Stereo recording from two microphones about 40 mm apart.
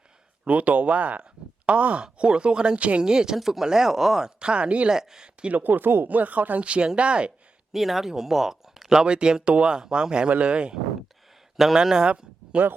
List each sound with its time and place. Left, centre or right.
0.4 s speech: right
3.0 s speech: centre
4.4 s speech: right
4.9 s speech: centre
5.5 s speech: right
6.1 s speech: right
7.7 s speech: centre; by 10.8 s right
11.5 s speech: centre
12.6 s speech: right